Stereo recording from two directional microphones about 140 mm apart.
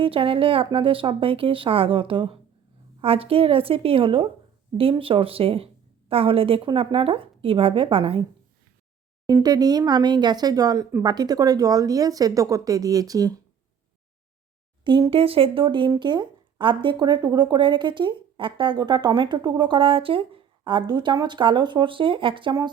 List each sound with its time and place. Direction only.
0.0 s speech: 40° right (ahead or behind)
9.2 s speech: 30° right (ahead or behind)
14.8 s speech: 35° right (ahead or behind)